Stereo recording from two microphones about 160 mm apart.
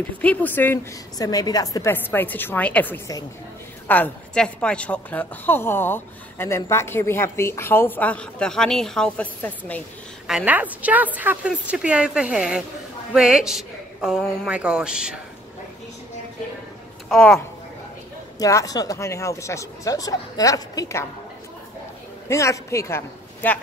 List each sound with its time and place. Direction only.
0.2 s a woman's voice: 10° left (ahead or behind)
10.2 s a woman's voice: 5° right (ahead or behind)
17.1 s a woman's voice: centre (ahead or behind)
18.4 s speech: 20° left (ahead or behind)
22.3 s a woman's voice: 20° left (ahead or behind)